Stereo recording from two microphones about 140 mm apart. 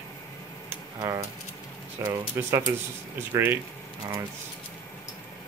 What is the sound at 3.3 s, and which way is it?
Speech, 15° right (ahead or behind).